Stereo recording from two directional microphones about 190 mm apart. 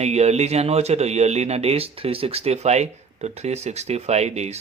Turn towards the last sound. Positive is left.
turn(degrees=-35)  # may be behind; listen again after turning